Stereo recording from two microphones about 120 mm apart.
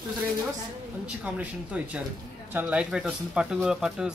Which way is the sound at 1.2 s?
10° right (ahead or behind).